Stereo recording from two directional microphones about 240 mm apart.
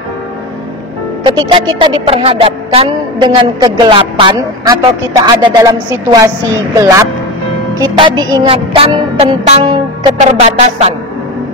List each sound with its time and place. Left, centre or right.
1.2 s music: right